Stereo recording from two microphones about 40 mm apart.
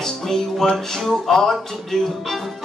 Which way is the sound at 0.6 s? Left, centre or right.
Centre.